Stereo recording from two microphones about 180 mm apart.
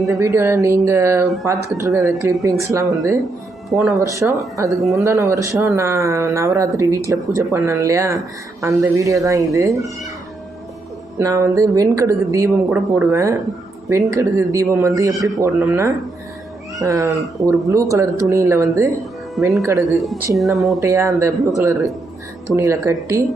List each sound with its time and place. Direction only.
0.1 s speech: 15° right (ahead or behind)
3.7 s speech: centre (ahead or behind)
4.1 s speech: 15° right (ahead or behind)
4.7 s speech: centre (ahead or behind)
4.9 s speech: 15° right (ahead or behind)
11.2 s speech: 15° right (ahead or behind)
19.4 s speech: centre (ahead or behind)
20.7 s speech: 15° right (ahead or behind)
22.5 s speech: 15° right (ahead or behind)